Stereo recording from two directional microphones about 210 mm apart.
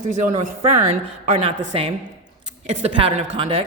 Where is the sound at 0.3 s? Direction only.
35° right (ahead or behind).